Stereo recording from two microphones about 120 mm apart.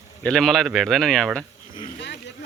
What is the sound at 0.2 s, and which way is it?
Speech, 5° left (ahead or behind).